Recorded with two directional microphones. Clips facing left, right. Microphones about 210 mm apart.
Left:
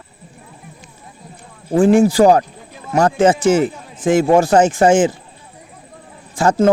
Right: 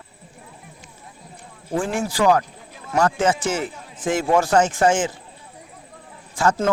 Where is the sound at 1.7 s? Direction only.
25° left (ahead or behind).